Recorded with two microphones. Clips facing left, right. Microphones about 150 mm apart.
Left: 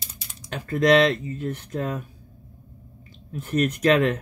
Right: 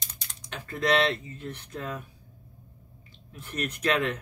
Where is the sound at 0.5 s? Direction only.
45° left (ahead or behind).